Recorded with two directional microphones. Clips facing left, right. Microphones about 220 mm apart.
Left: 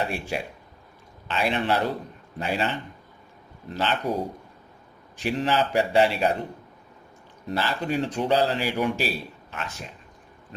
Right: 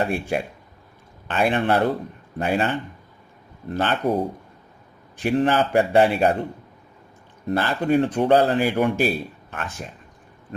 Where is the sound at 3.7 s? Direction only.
55° right (ahead or behind).